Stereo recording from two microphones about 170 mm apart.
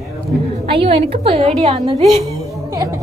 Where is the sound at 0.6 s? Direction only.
30° right (ahead or behind).